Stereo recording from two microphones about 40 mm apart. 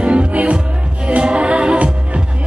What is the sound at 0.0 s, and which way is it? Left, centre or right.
Music, right.